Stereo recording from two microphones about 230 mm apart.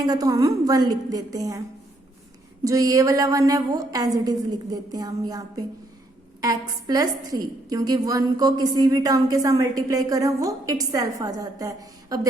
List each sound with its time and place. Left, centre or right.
0.0 s a woman's voice: centre
2.6 s a woman's voice: centre